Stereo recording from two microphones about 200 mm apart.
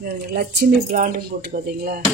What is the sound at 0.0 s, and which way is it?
Speech, 55° right (ahead or behind).